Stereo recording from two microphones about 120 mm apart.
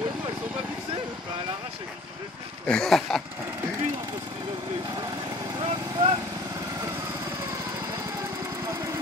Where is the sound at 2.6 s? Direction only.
5° left (ahead or behind).